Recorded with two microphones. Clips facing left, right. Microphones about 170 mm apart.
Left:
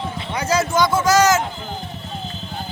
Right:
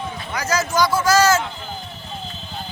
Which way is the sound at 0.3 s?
30° left (ahead or behind).